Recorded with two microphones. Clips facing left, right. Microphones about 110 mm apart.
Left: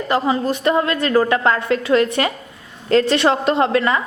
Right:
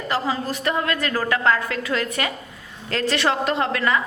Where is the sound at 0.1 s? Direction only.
20° left (ahead or behind).